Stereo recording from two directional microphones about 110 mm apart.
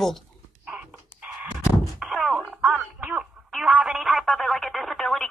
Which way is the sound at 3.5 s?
5° right (ahead or behind).